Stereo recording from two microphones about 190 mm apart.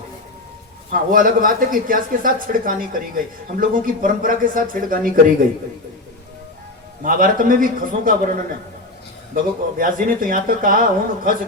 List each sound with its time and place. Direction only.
0.9 s speech: 45° right (ahead or behind)
7.0 s speech: 45° right (ahead or behind)
9.3 s speech: 45° right (ahead or behind)